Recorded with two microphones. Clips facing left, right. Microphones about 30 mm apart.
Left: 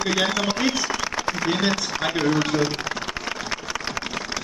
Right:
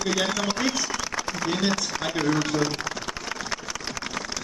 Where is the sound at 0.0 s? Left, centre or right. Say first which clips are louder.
Left 3 dB; centre.